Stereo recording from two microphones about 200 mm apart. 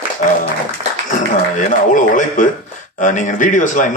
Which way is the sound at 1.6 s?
40° left (ahead or behind).